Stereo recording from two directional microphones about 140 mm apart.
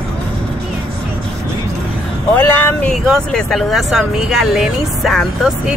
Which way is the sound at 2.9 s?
5° left (ahead or behind).